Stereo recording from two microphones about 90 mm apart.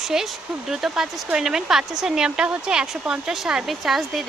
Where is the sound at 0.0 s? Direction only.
5° right (ahead or behind).